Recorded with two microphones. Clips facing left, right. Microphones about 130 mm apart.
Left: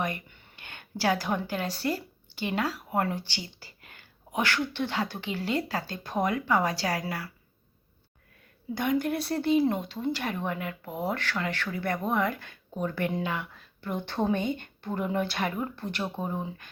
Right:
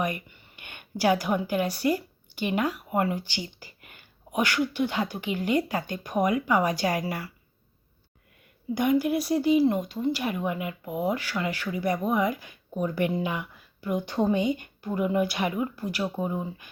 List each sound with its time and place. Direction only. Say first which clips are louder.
0.5 s a sound: right 2 dB; 15° right (ahead or behind)
1.5 s speech: right 5 dB; 15° right (ahead or behind)
8.7 s speech: right 4 dB; 15° right (ahead or behind)